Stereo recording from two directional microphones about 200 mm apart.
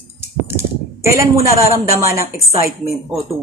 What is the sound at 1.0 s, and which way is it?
A woman's voice, 15° right (ahead or behind).